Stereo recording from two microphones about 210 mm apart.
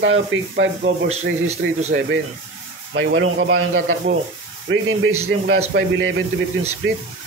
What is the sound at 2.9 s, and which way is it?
Speech, 65° right (ahead or behind).